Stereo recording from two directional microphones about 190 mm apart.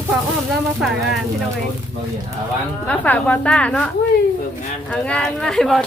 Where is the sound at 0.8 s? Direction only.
Centre (ahead or behind).